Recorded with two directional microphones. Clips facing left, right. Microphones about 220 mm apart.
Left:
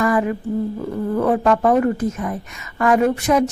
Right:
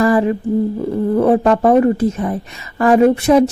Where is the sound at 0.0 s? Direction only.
30° right (ahead or behind).